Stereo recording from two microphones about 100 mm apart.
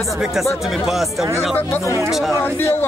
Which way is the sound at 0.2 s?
5° right (ahead or behind).